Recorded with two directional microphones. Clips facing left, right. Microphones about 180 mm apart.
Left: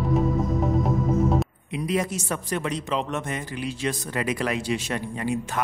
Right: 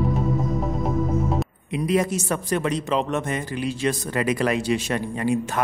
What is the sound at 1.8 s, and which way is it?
Speech, 45° right (ahead or behind).